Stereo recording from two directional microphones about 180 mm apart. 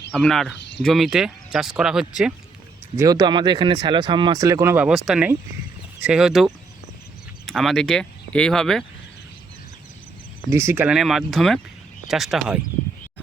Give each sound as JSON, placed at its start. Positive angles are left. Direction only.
{"t": 0.1, "sound": "speech", "side_deg": 5}
{"t": 2.9, "sound": "speech", "side_deg": -20}
{"t": 10.5, "sound": "speech", "side_deg": -15}